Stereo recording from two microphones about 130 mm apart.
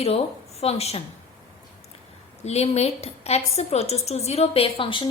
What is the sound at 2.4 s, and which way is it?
A woman's voice, 55° left (ahead or behind).